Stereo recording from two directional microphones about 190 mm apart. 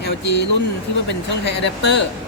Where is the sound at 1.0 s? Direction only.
65° left (ahead or behind).